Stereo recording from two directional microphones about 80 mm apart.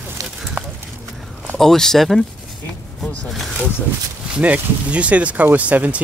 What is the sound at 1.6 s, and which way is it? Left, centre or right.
Speech, centre.